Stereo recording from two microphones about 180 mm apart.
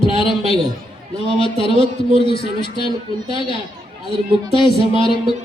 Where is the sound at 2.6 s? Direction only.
25° left (ahead or behind).